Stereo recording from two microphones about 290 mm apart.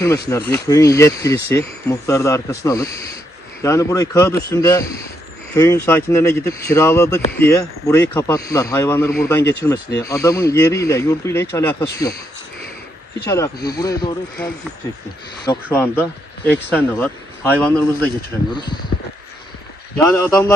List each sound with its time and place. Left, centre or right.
0.3 s speech: centre
13.3 s speech: centre
15.4 s a man's voice: centre
18.5 s speech: centre
20.0 s speech: centre